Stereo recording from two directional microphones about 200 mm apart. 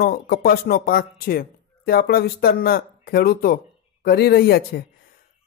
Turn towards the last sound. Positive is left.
turn(degrees=50)  # may be behind; listen again after turning